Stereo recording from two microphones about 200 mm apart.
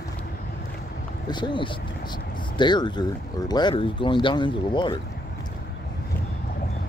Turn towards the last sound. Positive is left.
turn(degrees=25)  # may be behind; listen again after turning